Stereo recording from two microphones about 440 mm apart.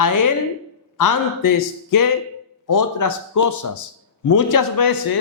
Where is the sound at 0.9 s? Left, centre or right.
Left.